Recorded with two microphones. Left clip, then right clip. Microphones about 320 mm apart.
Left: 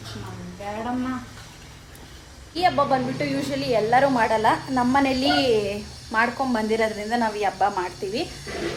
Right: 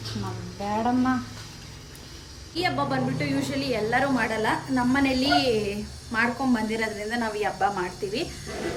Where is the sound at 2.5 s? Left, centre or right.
Centre.